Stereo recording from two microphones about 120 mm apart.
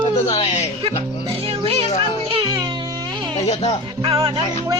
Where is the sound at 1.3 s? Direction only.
55° right (ahead or behind).